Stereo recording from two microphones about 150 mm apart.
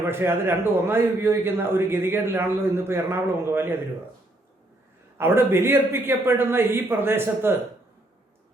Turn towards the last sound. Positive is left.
turn(degrees=-15)  # may be behind; listen again after turning